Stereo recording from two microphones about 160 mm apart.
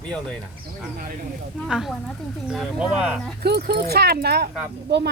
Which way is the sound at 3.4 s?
85° right.